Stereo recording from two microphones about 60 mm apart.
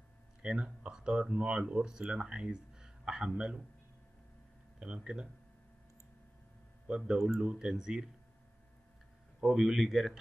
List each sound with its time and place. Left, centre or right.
0.4 s speech: centre
4.7 s speech: centre
7.1 s speech: centre
9.4 s speech: centre